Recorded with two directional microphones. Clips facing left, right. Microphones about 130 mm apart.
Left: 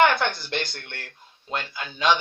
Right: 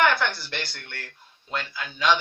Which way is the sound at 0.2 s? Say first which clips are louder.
Left 2 dB; 20° left (ahead or behind).